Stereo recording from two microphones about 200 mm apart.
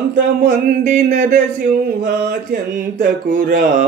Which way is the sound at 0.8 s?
40° right (ahead or behind).